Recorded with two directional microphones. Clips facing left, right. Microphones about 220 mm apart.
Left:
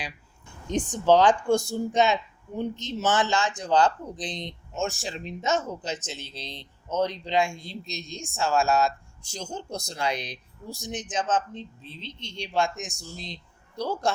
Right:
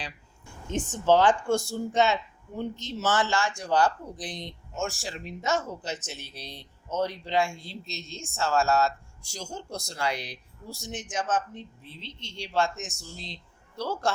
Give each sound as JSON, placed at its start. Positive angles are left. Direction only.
{"t": 0.7, "sound": "a woman's voice", "side_deg": 15}